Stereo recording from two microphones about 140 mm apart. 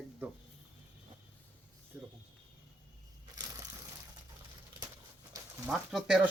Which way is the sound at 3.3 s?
30° right (ahead or behind).